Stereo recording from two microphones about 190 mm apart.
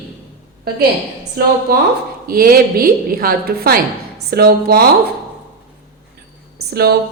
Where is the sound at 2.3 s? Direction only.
50° right (ahead or behind).